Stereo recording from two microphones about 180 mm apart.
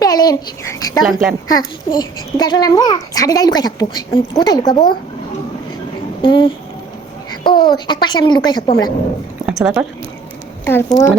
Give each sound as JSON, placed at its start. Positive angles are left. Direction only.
{"t": 0.0, "sound": "a child's voice", "side_deg": 20}
{"t": 1.0, "sound": "a woman's voice", "side_deg": 0}
{"t": 1.5, "sound": "a child's voice", "side_deg": 20}
{"t": 6.2, "sound": "a child's voice", "side_deg": 30}
{"t": 9.5, "sound": "speech", "side_deg": -5}
{"t": 10.7, "sound": "a woman's voice", "side_deg": 10}